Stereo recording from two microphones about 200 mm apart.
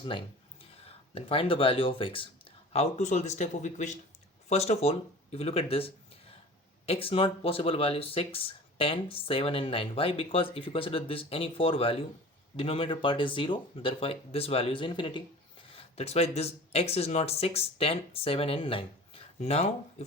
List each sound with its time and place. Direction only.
0.9 s speech: 30° left (ahead or behind)